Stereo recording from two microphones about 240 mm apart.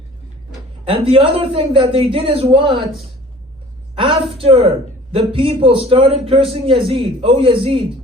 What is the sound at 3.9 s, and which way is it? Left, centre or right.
A man's voice, right.